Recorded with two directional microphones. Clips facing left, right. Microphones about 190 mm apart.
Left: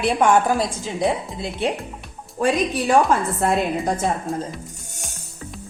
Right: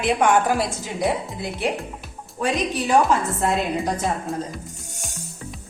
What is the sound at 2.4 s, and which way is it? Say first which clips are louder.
Speech: left 4 dB; 35° left (ahead or behind).